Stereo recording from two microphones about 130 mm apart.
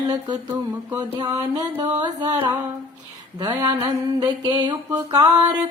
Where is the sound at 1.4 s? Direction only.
30° right (ahead or behind).